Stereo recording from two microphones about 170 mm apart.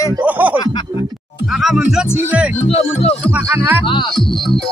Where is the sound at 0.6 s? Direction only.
30° left (ahead or behind).